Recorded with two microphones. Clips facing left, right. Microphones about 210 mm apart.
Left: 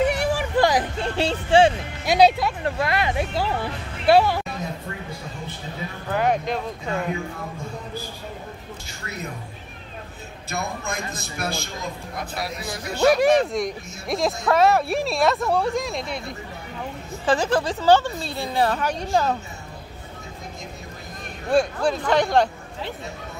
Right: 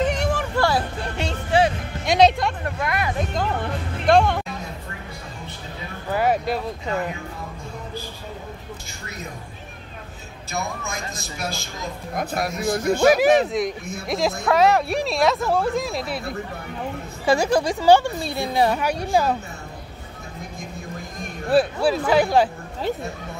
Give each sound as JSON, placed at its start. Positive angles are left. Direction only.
{"t": 0.0, "sound": "vehicle", "side_deg": 10}
{"t": 1.0, "sound": "a sound", "side_deg": 30}
{"t": 2.0, "sound": "speech", "side_deg": 5}
{"t": 2.6, "sound": "speech", "side_deg": 30}
{"t": 3.2, "sound": "speech", "side_deg": 5}
{"t": 6.1, "sound": "a woman's voice", "side_deg": -5}
{"t": 10.9, "sound": "a woman's voice", "side_deg": 60}
{"t": 12.2, "sound": "speech", "side_deg": -50}
{"t": 13.0, "sound": "a woman's voice", "side_deg": -5}
{"t": 21.5, "sound": "speech", "side_deg": -5}